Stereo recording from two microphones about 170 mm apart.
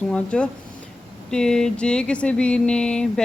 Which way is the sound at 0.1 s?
5° left (ahead or behind).